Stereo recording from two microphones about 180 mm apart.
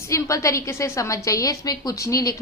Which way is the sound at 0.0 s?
15° left (ahead or behind).